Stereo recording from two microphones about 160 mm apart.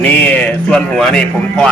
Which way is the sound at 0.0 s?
10° left (ahead or behind).